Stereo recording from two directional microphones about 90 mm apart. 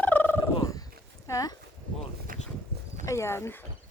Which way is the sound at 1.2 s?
40° left (ahead or behind).